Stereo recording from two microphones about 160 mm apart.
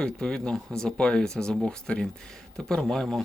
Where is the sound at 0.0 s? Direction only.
5° left (ahead or behind).